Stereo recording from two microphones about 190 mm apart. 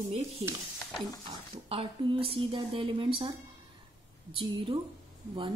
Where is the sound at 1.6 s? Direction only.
30° right (ahead or behind).